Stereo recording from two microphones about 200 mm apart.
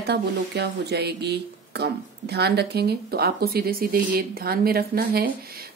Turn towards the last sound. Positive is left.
turn(degrees=-50)  # may be behind; listen again after turning